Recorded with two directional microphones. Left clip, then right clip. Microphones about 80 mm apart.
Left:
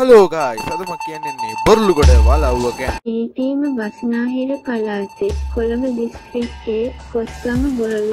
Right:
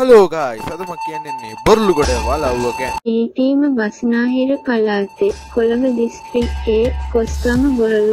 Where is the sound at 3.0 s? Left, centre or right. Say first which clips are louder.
Right 7 dB; right.